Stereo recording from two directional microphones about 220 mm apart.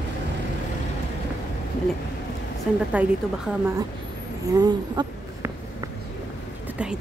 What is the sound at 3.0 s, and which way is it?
Speech, 5° right (ahead or behind).